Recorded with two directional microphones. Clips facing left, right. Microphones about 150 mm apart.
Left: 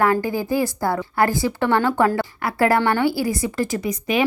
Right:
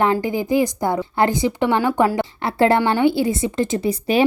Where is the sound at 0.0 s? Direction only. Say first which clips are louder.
Right 1 dB; 20° right (ahead or behind).